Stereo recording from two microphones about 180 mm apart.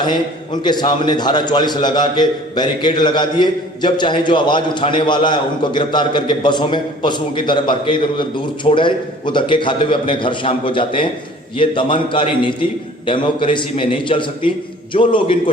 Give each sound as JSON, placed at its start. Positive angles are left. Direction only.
{"t": 0.0, "sound": "a man's voice", "side_deg": 25}